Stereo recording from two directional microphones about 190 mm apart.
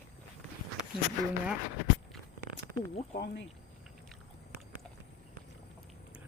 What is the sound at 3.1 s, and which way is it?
Speech, 60° left (ahead or behind).